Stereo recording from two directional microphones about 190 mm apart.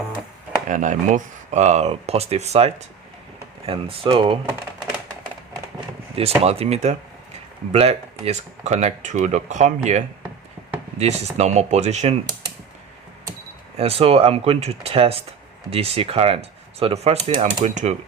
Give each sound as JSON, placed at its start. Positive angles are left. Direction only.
{"t": 0.7, "sound": "speech", "side_deg": -40}
{"t": 6.1, "sound": "speech", "side_deg": -30}
{"t": 13.7, "sound": "speech", "side_deg": -30}